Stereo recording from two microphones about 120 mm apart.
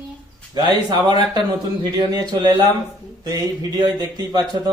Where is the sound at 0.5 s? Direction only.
35° right (ahead or behind).